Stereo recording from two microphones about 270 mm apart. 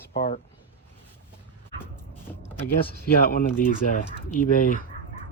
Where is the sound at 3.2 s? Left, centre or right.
Left.